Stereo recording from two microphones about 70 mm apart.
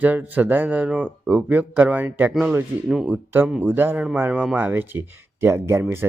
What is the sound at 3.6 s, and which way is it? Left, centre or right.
A man's voice, right.